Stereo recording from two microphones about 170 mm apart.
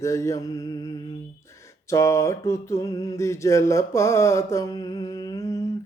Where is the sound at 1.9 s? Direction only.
15° left (ahead or behind).